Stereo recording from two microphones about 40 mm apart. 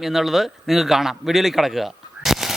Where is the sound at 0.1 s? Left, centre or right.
Centre.